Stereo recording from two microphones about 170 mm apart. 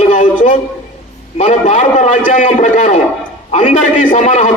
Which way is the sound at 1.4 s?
45° left (ahead or behind).